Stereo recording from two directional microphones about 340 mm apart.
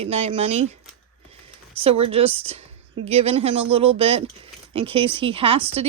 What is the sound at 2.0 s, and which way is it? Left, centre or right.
A woman's voice, centre.